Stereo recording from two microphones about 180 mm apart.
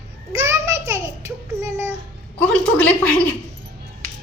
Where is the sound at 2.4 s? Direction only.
10° left (ahead or behind).